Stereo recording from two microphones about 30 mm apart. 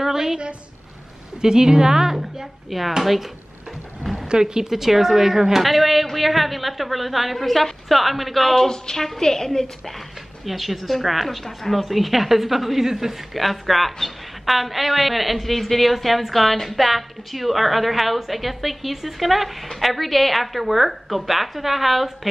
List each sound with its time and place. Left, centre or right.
0.0 s a sound: centre
1.4 s a woman's voice: right; by 3.3 s centre
4.3 s a woman's voice: right
4.6 s speech: centre
5.5 s a woman's voice: centre
8.5 s a woman's voice: left
9.8 s a woman's voice: centre
11.8 s a woman's voice: centre